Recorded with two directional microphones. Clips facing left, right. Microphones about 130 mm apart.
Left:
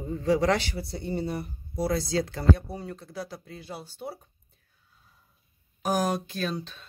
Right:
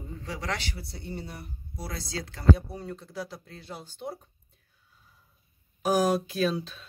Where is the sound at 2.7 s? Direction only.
5° left (ahead or behind).